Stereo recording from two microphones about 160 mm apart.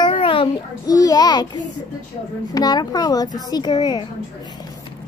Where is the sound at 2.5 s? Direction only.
25° left (ahead or behind).